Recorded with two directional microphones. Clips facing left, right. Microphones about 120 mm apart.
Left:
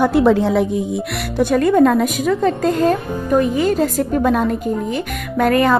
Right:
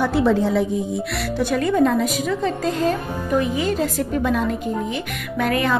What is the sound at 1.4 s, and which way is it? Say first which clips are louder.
Speech: left 6 dB; 50° left (ahead or behind).